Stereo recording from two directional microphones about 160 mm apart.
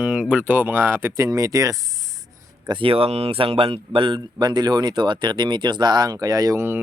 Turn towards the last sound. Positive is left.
turn(degrees=-15)  # may be behind; listen again after turning